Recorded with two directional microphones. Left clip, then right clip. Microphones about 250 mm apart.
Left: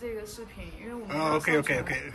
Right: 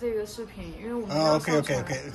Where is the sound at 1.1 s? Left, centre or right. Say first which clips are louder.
Right 2 dB; centre.